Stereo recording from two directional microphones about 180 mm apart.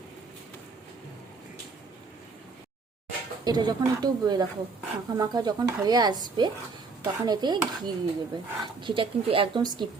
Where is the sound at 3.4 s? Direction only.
25° right (ahead or behind).